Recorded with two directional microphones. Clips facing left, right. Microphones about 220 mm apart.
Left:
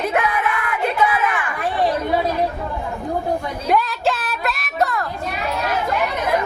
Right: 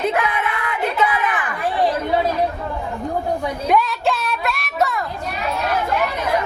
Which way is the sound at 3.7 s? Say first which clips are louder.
Even; centre (ahead or behind).